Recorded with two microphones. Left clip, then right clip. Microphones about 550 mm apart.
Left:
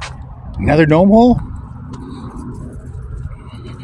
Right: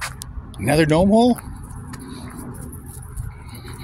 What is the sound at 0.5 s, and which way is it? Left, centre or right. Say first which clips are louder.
Speech: left 5 dB; right.